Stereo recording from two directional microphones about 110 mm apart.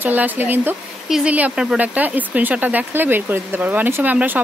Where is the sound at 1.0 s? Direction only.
5° right (ahead or behind).